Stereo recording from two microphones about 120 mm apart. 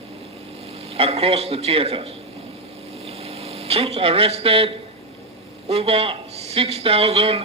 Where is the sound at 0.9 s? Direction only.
55° right (ahead or behind).